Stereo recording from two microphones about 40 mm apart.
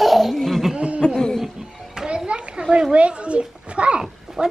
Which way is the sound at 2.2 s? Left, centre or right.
Right.